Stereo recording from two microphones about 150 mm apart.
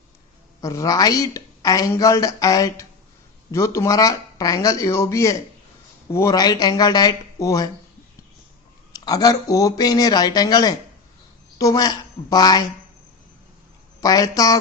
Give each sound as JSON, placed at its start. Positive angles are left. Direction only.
{"t": 0.6, "sound": "a woman's voice", "side_deg": 20}
{"t": 8.9, "sound": "a woman's voice", "side_deg": 25}
{"t": 14.0, "sound": "a woman's voice", "side_deg": 25}